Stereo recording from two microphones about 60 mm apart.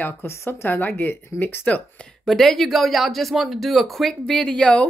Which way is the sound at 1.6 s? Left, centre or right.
Left.